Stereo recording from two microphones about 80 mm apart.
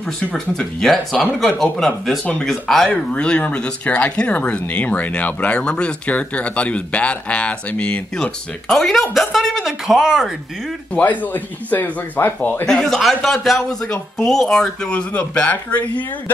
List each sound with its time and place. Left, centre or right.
0.2 s speech: centre
3.1 s speech: centre
8.6 s speech: centre
10.9 s speech: left
12.6 s speech: centre